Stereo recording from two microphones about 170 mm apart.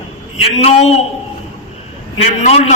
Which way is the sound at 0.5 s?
40° left (ahead or behind).